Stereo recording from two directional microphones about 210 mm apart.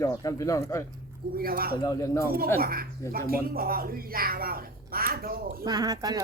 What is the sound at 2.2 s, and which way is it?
Speech, 45° right (ahead or behind).